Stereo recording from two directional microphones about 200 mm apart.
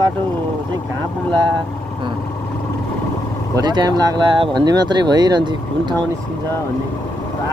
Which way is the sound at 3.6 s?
20° right (ahead or behind).